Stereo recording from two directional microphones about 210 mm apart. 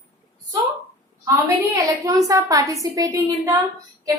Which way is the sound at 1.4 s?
15° right (ahead or behind).